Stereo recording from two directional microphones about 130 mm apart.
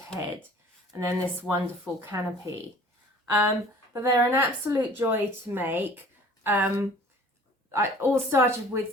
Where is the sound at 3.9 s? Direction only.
20° right (ahead or behind).